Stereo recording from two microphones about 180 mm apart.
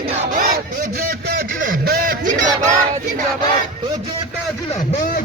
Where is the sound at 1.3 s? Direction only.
55° right (ahead or behind).